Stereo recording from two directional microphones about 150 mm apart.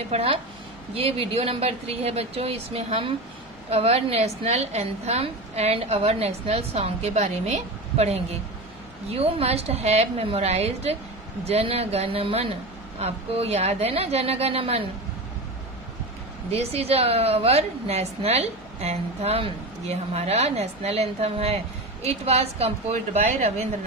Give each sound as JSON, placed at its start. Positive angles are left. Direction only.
{"t": 0.1, "sound": "a woman's voice", "side_deg": -40}
{"t": 16.4, "sound": "a woman's voice", "side_deg": -45}